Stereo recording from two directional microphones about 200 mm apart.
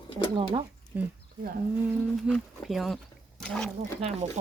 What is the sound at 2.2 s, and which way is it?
Speech, centre (ahead or behind).